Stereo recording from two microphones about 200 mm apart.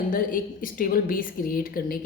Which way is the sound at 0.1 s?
45° left (ahead or behind).